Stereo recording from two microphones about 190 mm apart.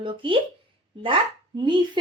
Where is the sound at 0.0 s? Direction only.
25° right (ahead or behind).